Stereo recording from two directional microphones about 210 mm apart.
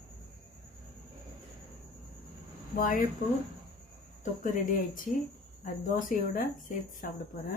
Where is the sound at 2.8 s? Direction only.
40° left (ahead or behind).